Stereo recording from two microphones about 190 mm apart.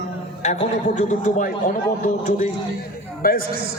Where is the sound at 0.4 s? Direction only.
40° left (ahead or behind).